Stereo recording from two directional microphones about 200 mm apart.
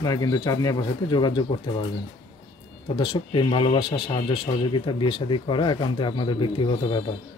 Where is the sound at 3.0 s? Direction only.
25° left (ahead or behind).